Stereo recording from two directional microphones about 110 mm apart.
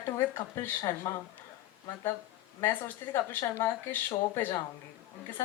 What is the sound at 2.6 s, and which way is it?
Speech, 20° left (ahead or behind).